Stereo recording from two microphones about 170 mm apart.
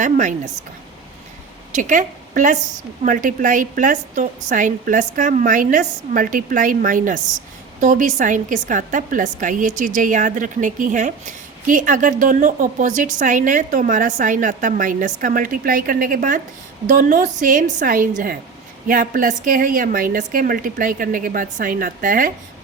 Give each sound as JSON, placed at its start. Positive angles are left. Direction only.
{"t": 0.0, "sound": "a woman's voice", "side_deg": -45}
{"t": 1.7, "sound": "a woman's voice", "side_deg": -50}